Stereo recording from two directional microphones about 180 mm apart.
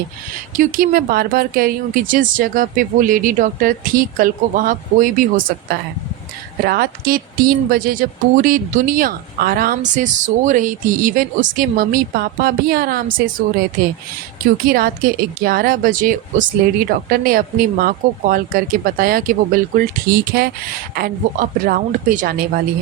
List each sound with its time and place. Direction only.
0.5 s speech: 50° right (ahead or behind)